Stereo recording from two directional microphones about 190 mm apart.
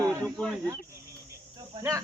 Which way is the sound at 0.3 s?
Centre (ahead or behind).